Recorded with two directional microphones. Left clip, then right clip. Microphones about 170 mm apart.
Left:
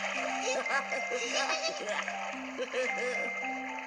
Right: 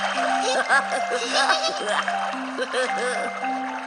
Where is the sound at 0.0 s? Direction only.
35° right (ahead or behind).